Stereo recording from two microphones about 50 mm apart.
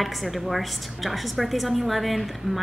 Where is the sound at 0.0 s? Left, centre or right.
Centre.